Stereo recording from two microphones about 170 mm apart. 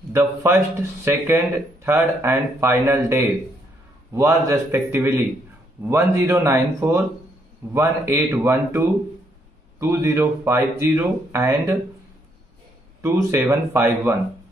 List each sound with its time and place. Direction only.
0.1 s speech: 15° right (ahead or behind)
13.0 s speech: 15° right (ahead or behind)